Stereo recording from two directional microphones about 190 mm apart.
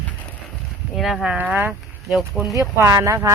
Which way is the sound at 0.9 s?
Centre (ahead or behind).